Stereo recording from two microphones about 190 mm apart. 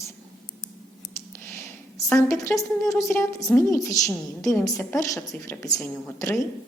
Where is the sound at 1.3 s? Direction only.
15° left (ahead or behind).